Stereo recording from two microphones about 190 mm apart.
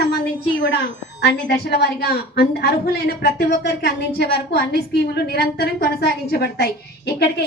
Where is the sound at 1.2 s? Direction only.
60° left (ahead or behind).